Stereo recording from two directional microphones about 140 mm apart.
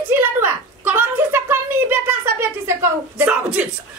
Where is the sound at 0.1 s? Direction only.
15° right (ahead or behind).